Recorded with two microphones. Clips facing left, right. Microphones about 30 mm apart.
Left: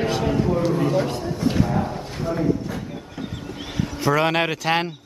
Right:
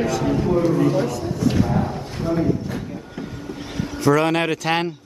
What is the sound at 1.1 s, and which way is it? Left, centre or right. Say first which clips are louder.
Speech: right 1 dB; left.